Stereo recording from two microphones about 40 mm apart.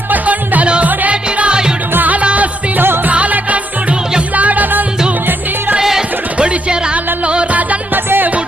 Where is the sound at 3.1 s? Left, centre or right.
Right.